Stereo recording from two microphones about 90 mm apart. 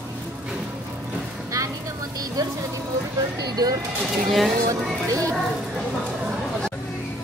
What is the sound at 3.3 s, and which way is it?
Speech, 45° right (ahead or behind).